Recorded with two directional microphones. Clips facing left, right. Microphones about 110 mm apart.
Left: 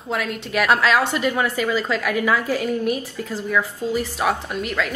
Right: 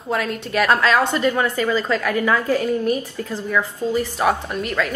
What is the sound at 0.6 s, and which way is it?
A woman's voice, 5° left (ahead or behind).